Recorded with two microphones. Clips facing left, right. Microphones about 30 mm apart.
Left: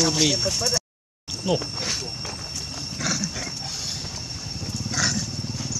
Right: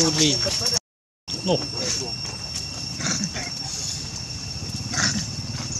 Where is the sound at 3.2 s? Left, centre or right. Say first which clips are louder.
Right 1 dB; centre.